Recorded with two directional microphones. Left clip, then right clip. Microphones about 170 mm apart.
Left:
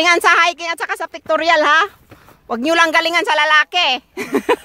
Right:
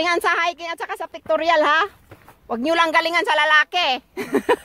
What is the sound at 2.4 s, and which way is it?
A woman's voice, 30° left (ahead or behind).